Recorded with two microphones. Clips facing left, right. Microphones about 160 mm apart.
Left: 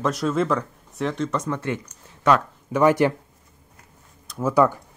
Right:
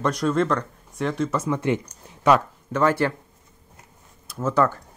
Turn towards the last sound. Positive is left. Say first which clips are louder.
# left 2 dB
turn(degrees=10)  # may be behind; listen again after turning